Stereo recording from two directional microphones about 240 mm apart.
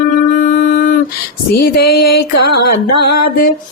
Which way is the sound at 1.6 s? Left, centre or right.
Left.